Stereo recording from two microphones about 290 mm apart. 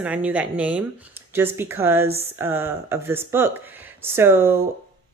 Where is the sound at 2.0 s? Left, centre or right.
Right.